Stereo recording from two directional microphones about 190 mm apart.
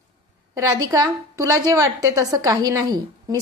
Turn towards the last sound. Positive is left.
turn(degrees=-20)  # may be behind; listen again after turning